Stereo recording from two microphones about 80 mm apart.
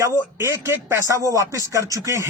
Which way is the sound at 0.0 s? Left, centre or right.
Right.